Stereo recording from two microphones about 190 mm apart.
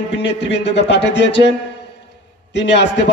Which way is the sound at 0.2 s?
65° left (ahead or behind).